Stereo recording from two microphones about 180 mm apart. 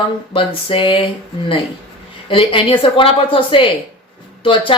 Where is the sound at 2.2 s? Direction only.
30° left (ahead or behind).